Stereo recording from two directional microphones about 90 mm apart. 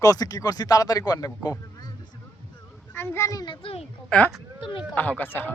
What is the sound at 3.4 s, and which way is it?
Speech, 75° left (ahead or behind).